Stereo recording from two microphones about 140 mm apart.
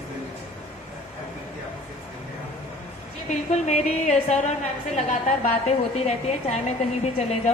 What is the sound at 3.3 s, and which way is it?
A woman's voice, 55° left (ahead or behind).